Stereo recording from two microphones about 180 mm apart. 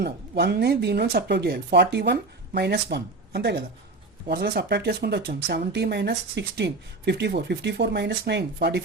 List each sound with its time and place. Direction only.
0.0 s speech: 60° right (ahead or behind)